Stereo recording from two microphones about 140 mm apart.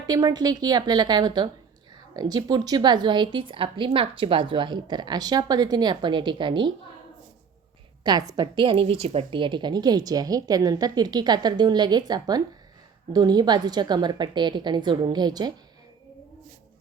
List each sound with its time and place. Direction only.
0.1 s a woman's voice: 30° right (ahead or behind)
8.0 s a woman's voice: 30° right (ahead or behind)